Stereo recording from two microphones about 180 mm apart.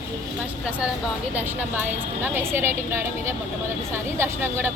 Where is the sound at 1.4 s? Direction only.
10° right (ahead or behind).